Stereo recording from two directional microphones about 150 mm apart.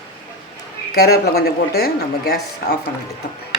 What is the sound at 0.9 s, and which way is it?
Speech, 90° left.